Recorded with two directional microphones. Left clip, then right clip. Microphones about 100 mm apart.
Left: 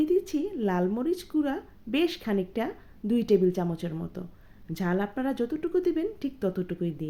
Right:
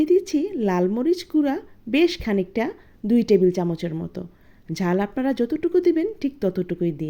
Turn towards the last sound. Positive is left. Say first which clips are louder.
# right 7 dB
turn(degrees=-20)  # may be behind; listen again after turning